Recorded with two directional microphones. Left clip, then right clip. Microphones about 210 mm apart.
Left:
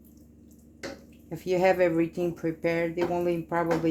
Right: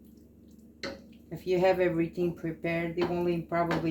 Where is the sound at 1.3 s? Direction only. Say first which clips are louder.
Left 2 dB; 45° left (ahead or behind).